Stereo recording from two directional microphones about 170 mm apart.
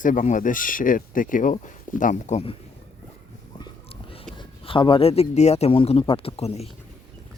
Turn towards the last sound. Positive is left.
turn(degrees=35)  # may be behind; listen again after turning